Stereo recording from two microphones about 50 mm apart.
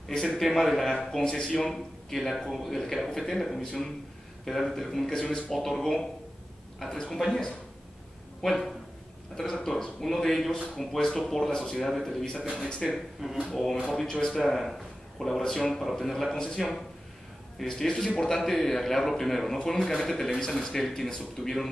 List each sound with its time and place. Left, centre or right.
0.1 s a man's voice: centre
12.5 s a man's voice: centre
12.8 s a man's voice: centre
13.8 s a man's voice: centre
14.4 s a man's voice: centre
17.6 s a man's voice: centre